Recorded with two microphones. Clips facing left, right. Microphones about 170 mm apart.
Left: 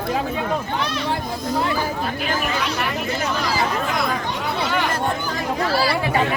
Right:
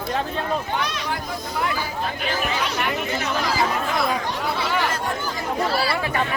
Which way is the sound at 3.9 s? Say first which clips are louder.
Even; centre (ahead or behind).